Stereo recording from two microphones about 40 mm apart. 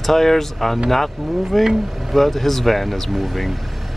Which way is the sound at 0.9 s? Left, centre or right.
Centre.